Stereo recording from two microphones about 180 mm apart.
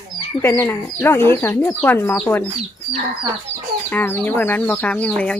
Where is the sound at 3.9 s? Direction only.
10° left (ahead or behind).